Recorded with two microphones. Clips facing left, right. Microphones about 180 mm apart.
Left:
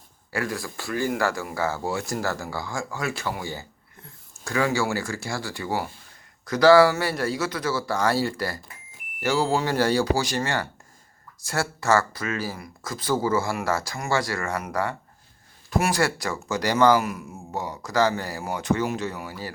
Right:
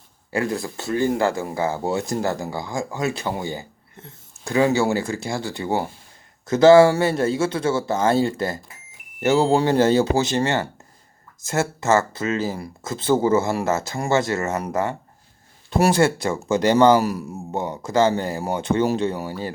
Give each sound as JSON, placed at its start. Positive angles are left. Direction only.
{"t": 0.3, "sound": "speech", "side_deg": -20}
{"t": 17.0, "sound": "speech", "side_deg": -35}
{"t": 17.3, "sound": "speech", "side_deg": -25}